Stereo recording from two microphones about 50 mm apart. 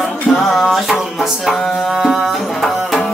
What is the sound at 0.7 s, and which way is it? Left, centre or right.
Music, centre.